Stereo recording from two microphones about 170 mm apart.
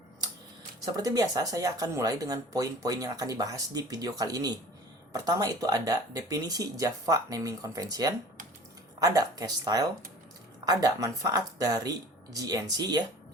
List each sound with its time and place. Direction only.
0.9 s speech: 20° right (ahead or behind)